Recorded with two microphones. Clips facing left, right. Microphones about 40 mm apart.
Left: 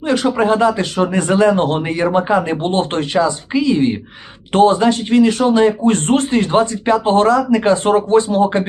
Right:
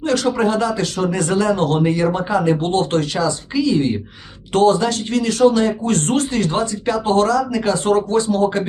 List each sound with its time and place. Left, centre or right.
0.0 s speech: left